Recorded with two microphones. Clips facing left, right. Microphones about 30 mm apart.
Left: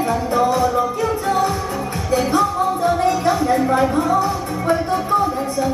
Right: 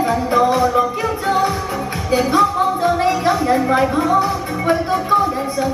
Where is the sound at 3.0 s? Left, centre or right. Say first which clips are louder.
Right 1 dB; right.